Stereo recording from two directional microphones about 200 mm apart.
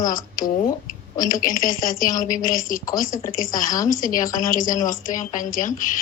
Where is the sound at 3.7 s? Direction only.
15° left (ahead or behind).